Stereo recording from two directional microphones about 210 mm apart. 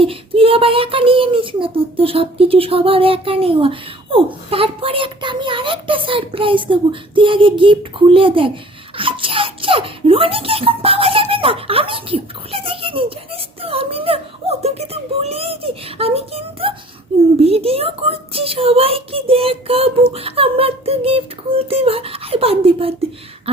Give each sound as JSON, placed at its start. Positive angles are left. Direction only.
{"t": 0.0, "sound": "speech", "side_deg": -25}